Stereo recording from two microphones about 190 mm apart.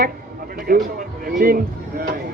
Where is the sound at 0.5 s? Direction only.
50° right (ahead or behind).